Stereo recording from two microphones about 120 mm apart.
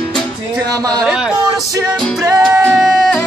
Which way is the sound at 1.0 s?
5° right (ahead or behind).